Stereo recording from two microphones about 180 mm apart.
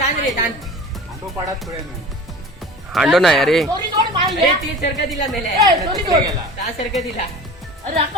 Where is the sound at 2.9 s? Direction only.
Centre (ahead or behind).